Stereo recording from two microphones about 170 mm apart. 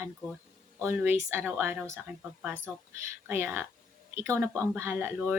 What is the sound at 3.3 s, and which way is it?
Speech, 10° right (ahead or behind).